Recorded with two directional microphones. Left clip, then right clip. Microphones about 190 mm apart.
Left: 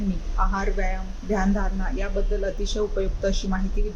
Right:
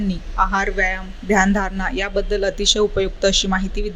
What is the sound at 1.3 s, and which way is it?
Speech, 30° right (ahead or behind).